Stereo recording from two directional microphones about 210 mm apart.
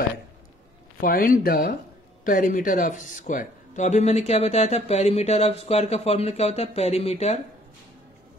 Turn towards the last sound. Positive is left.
turn(degrees=30)  # may be behind; listen again after turning